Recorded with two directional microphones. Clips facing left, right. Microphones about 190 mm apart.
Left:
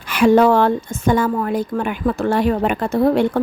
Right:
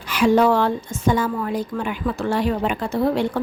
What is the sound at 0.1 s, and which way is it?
A woman's voice, 55° left (ahead or behind).